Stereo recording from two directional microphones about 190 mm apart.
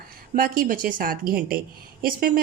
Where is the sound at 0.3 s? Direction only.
50° right (ahead or behind).